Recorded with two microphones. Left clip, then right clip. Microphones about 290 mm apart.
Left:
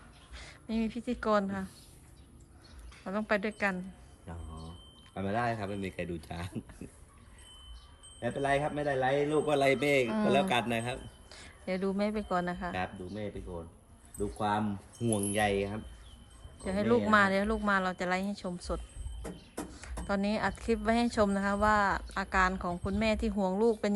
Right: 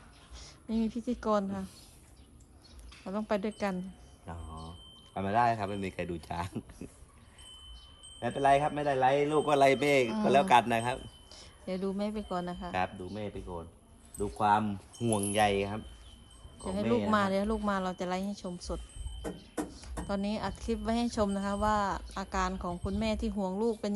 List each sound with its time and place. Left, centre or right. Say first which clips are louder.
0.3 s speech: right 1 dB; centre
2.9 s a woman's voice: left 2 dB; centre
8.2 s a man's voice: right 4 dB; centre
9.8 s a man's voice: right 1 dB; right
10.9 s a woman's voice: right 2 dB; centre
16.6 s a woman's voice: left 2 dB; centre
20.1 s a woman's voice: left 4 dB; centre